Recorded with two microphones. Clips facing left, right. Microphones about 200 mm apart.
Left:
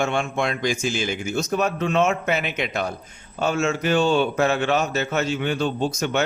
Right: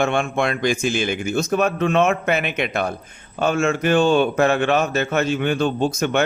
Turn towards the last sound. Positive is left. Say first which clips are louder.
# right 3 dB
turn(degrees=-55)  # may be behind; listen again after turning